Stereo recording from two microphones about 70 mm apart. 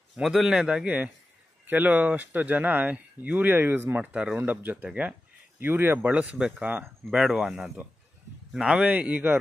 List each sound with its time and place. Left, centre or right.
0.1 s a man's voice: centre; by 6.1 s right
6.1 s speech: centre
7.1 s a man's voice: centre
7.6 s speech: right